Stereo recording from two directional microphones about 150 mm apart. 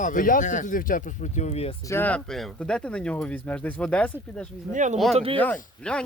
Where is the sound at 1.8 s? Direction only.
15° left (ahead or behind).